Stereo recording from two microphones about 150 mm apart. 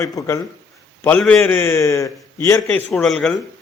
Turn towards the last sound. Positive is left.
turn(degrees=0)  # may be behind; listen again after turning